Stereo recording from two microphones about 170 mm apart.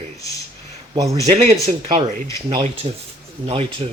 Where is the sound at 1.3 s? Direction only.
40° right (ahead or behind).